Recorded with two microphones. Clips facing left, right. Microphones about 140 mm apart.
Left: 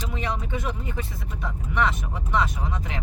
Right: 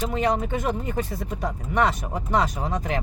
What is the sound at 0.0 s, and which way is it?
Speech, 45° right (ahead or behind).